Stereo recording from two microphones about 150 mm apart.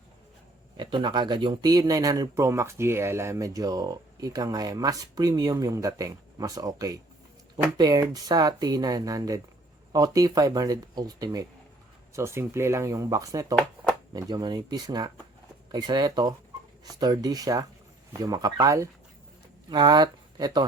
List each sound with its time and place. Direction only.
0.8 s speech: 30° right (ahead or behind)